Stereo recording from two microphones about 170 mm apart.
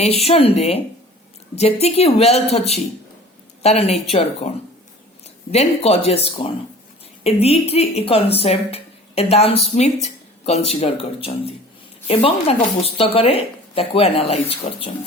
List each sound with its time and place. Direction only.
0.0 s speech: 35° left (ahead or behind)